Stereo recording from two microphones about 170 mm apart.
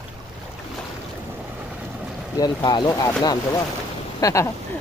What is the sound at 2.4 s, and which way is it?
Speech, 25° left (ahead or behind).